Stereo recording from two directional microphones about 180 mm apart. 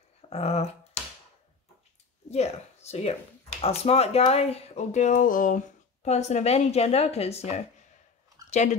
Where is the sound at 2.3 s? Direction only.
35° left (ahead or behind).